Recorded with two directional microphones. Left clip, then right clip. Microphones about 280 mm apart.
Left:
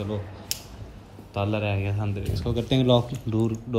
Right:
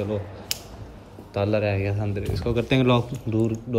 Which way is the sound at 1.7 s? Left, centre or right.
Centre.